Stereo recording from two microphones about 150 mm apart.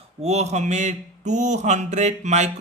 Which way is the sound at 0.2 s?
45° right (ahead or behind).